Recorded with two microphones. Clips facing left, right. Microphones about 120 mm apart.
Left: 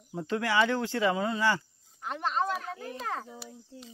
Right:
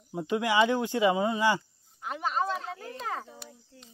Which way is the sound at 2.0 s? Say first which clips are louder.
Even; 5° right (ahead or behind).